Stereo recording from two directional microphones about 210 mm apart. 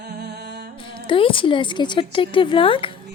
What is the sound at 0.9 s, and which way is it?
Speech, 25° left (ahead or behind).